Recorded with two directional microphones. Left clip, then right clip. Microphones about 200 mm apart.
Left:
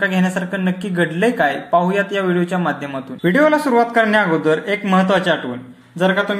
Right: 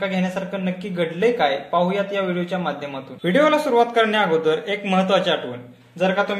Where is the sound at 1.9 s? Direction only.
20° left (ahead or behind).